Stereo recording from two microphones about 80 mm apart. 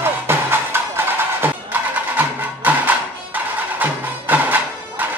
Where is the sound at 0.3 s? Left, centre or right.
Right.